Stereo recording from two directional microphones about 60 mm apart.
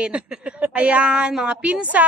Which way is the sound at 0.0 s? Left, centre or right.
Centre.